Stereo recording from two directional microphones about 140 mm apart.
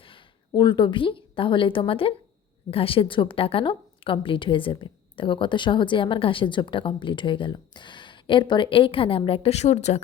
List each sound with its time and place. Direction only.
0.0 s a woman's voice: 40° left (ahead or behind)